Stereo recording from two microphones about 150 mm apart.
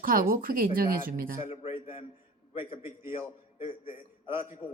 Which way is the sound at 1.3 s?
45° left (ahead or behind).